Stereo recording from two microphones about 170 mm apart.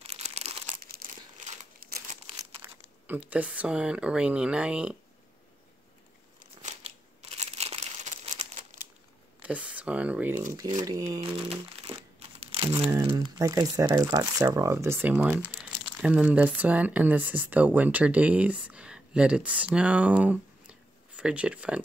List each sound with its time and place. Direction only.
0.0 s crumpling: 40° right (ahead or behind)
0.7 s crumpling: 60° right (ahead or behind)
3.1 s speech: 10° right (ahead or behind)
6.4 s crumpling: 40° right (ahead or behind)
9.4 s speech: 10° right (ahead or behind)
10.8 s speech: 20° right (ahead or behind)
11.9 s crumpling: 35° right (ahead or behind)
13.0 s speech: 25° right (ahead or behind); by 21.8 s 5° right (ahead or behind)